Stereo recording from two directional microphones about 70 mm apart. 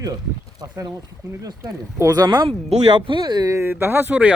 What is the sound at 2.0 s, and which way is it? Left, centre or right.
Speech, right.